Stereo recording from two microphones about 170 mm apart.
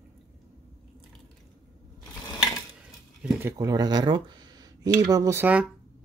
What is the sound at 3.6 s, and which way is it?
Speech, 25° right (ahead or behind).